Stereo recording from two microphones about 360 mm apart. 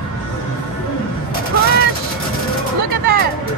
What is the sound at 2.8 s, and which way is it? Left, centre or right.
Music, right.